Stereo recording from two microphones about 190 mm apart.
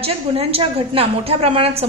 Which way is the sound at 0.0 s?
30° right (ahead or behind).